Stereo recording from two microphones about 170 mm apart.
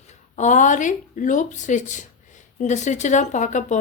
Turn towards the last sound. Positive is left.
turn(degrees=45)  # may be behind; listen again after turning